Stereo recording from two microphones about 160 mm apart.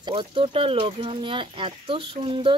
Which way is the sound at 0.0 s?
30° right (ahead or behind).